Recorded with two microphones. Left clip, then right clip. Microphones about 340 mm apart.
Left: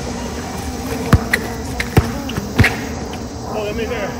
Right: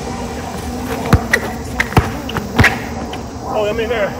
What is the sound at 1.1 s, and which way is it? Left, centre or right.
Basketball bounce, centre.